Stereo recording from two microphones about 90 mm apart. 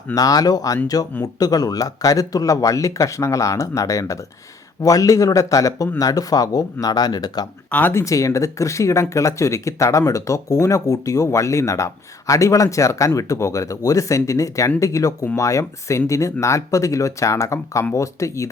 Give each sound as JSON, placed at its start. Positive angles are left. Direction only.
{"t": 0.1, "sound": "speech", "side_deg": 40}
{"t": 7.7, "sound": "speech", "side_deg": 20}
{"t": 8.0, "sound": "speech", "side_deg": 35}